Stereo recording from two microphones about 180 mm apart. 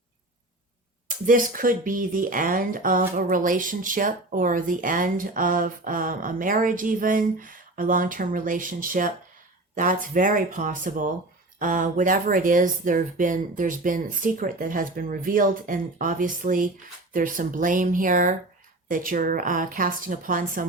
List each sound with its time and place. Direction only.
1.0 s speech: 50° right (ahead or behind)